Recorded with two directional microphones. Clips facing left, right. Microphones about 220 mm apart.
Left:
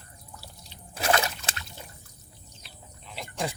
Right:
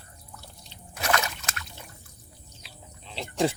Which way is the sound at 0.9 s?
30° left (ahead or behind).